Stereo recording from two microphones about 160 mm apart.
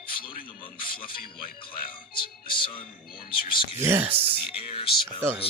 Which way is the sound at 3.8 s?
15° right (ahead or behind).